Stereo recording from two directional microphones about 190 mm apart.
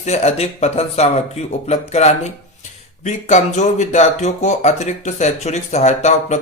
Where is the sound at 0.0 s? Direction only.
35° left (ahead or behind).